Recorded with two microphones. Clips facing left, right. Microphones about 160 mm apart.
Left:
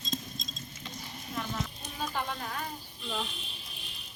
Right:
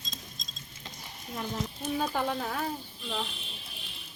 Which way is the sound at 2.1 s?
45° right (ahead or behind).